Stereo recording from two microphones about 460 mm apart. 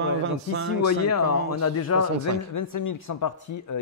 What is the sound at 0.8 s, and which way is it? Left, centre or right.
Speech, left.